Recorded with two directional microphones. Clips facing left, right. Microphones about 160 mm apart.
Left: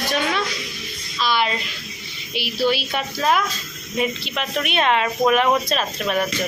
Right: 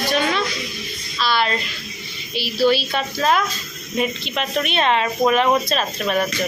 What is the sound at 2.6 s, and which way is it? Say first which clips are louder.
A woman's voice: right 4 dB; 10° left (ahead or behind).